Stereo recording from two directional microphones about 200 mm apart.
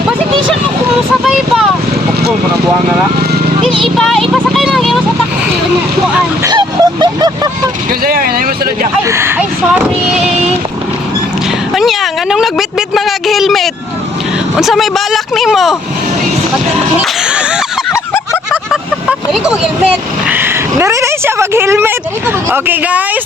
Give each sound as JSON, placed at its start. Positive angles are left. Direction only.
{"t": 1.2, "sound": "a sound", "side_deg": 0}
{"t": 3.9, "sound": "speech", "side_deg": 5}
{"t": 6.4, "sound": "vehicle", "side_deg": -20}
{"t": 8.0, "sound": "speech", "side_deg": -50}
{"t": 9.0, "sound": "speech", "side_deg": -15}
{"t": 11.7, "sound": "speech", "side_deg": 0}
{"t": 17.0, "sound": "a sound", "side_deg": -5}
{"t": 18.5, "sound": "vehicle", "side_deg": -5}
{"t": 20.2, "sound": "a sound", "side_deg": -10}
{"t": 22.4, "sound": "speech", "side_deg": -10}